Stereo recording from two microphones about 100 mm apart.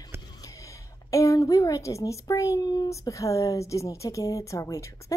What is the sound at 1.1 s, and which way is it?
Speech, 35° left (ahead or behind).